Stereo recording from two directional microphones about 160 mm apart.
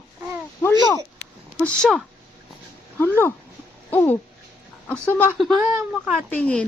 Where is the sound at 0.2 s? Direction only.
15° right (ahead or behind).